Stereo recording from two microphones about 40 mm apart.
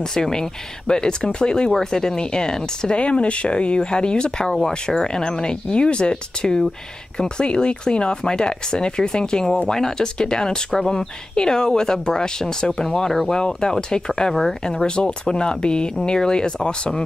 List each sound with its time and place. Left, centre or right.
0.1 s speech: centre
3.0 s speech: left; by 14.9 s centre
15.0 s speech: left